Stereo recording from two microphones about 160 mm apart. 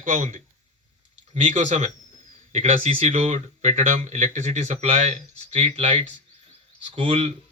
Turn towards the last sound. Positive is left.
turn(degrees=-40)  # may be behind; listen again after turning